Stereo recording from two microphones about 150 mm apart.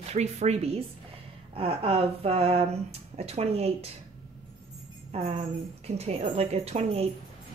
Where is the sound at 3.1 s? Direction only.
40° right (ahead or behind).